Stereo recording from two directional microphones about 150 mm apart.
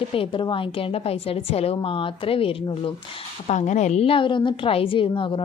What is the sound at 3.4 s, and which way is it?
A woman's voice, 50° left (ahead or behind).